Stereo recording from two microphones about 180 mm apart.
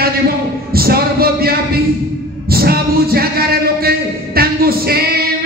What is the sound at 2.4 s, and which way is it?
Music, 60° right (ahead or behind).